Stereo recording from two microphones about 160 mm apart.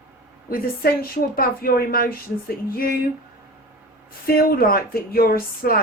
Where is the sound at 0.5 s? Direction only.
65° left (ahead or behind).